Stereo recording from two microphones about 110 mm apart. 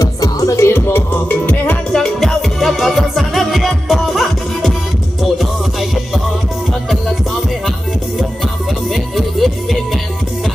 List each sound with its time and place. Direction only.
0.0 s music: 35° left (ahead or behind); by 2.0 s 15° left (ahead or behind)
2.0 s music: 5° left (ahead or behind)
8.9 s music: centre (ahead or behind)